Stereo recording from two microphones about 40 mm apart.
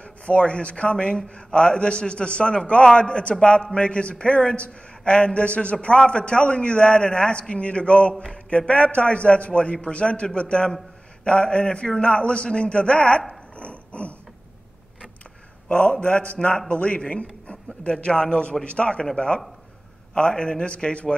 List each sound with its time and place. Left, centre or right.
0.0 s speech: left
13.3 s dog: left
15.7 s a man's voice: left